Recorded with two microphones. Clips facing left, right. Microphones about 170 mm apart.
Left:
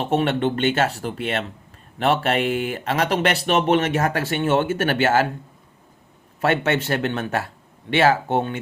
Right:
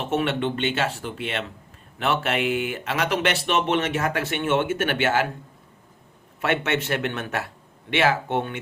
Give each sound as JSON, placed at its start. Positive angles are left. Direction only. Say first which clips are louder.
{"t": 0.0, "sound": "speech", "louder": "left 4 dB", "side_deg": 35}
{"t": 6.4, "sound": "speech", "louder": "left 4 dB", "side_deg": 35}